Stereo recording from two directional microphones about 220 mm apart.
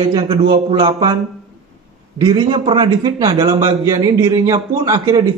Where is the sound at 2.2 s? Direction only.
20° right (ahead or behind).